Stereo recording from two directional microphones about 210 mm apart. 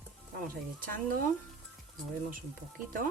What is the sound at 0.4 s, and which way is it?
Speech, 45° right (ahead or behind).